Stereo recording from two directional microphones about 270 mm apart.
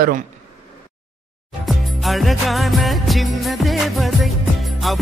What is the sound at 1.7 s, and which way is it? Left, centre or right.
Music, centre.